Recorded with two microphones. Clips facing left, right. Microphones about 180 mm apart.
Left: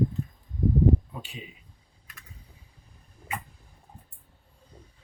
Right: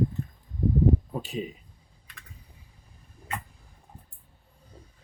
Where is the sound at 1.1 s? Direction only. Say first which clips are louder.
Right 9 dB; 40° right (ahead or behind).